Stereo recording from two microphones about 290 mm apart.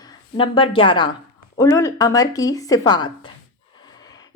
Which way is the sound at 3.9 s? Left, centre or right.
Centre.